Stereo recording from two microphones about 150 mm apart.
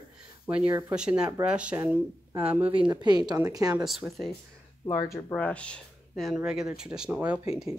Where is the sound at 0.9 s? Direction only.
5° right (ahead or behind).